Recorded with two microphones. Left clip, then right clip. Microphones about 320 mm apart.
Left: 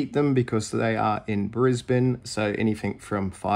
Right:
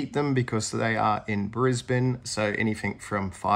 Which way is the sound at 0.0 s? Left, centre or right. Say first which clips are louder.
Left 3 dB; centre.